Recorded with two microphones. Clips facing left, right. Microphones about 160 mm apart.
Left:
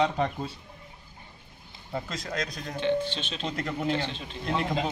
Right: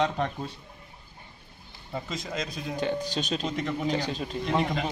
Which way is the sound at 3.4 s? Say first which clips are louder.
Right 1 dB; centre (ahead or behind).